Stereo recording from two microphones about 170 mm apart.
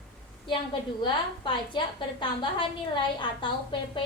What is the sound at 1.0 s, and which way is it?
A woman's voice, 30° left (ahead or behind).